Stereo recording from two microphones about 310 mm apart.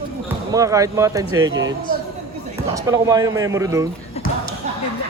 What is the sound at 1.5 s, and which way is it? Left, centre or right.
Speech, right.